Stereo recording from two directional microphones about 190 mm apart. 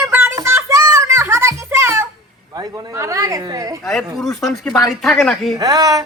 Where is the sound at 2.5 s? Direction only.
20° right (ahead or behind).